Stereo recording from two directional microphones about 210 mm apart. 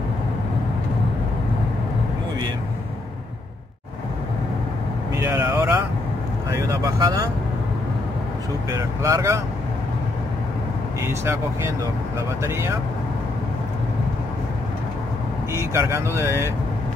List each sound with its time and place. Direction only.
5.1 s vehicle: 10° right (ahead or behind)
6.5 s speech: 15° right (ahead or behind)
8.7 s speech: 15° right (ahead or behind)
15.5 s speech: 15° right (ahead or behind)